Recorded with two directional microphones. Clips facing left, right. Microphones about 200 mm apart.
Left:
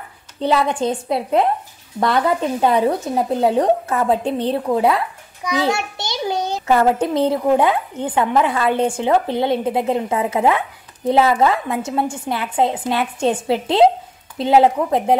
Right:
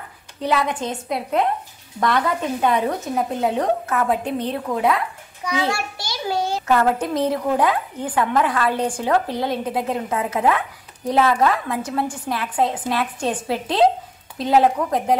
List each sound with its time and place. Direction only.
0.4 s a child's voice: 30° left (ahead or behind)